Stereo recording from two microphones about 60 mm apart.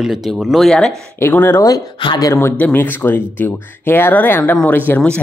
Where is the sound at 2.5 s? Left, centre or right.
Left.